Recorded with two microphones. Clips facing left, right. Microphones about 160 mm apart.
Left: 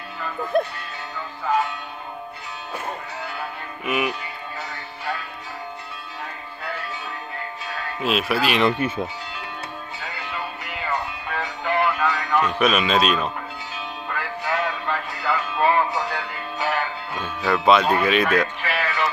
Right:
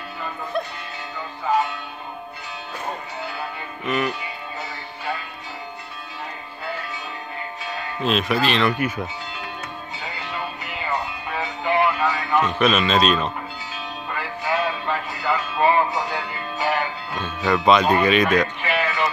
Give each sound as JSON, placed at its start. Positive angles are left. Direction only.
{"t": 0.5, "sound": "speech", "side_deg": 50}
{"t": 3.8, "sound": "a man's voice", "side_deg": 10}
{"t": 8.0, "sound": "a man's voice", "side_deg": 5}
{"t": 8.6, "sound": "speech", "side_deg": 25}
{"t": 10.6, "sound": "music", "side_deg": 0}
{"t": 12.4, "sound": "a man's voice", "side_deg": 10}
{"t": 14.1, "sound": "music", "side_deg": -10}
{"t": 17.1, "sound": "speech", "side_deg": 5}